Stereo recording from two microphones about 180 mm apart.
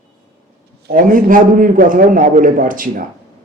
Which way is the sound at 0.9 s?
50° right (ahead or behind).